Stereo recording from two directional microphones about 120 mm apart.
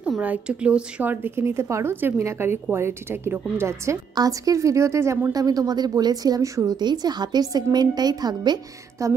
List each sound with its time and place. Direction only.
0.0 s a woman's voice: 10° right (ahead or behind); by 9.1 s 25° right (ahead or behind)